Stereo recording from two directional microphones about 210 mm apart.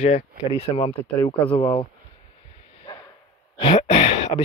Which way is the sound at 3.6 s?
30° left (ahead or behind).